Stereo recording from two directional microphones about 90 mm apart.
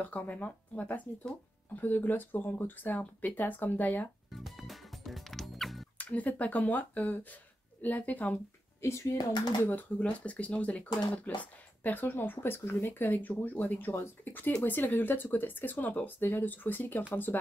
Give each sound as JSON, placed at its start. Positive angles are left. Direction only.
{"t": 0.0, "sound": "speech", "side_deg": 15}
{"t": 4.3, "sound": "music", "side_deg": 0}
{"t": 5.9, "sound": "speech", "side_deg": 15}
{"t": 8.8, "sound": "speech", "side_deg": 30}
{"t": 9.2, "sound": "speech", "side_deg": 50}
{"t": 9.6, "sound": "speech", "side_deg": 20}